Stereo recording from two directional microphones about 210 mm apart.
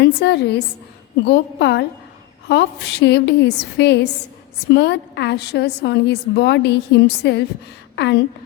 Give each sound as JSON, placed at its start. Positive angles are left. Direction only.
{"t": 0.0, "sound": "a woman's voice", "side_deg": 55}